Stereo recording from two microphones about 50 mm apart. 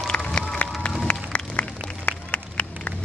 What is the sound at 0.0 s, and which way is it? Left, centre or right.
Run, centre.